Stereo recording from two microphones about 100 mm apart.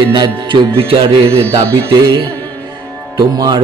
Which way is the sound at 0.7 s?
65° right (ahead or behind).